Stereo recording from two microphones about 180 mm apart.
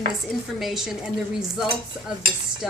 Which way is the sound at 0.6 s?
Centre (ahead or behind).